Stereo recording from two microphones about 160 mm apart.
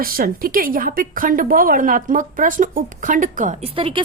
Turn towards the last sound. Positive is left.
turn(degrees=-35)  # may be behind; listen again after turning